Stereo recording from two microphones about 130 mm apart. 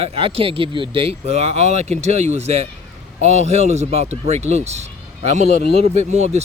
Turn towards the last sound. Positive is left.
turn(degrees=-60)  # may be behind; listen again after turning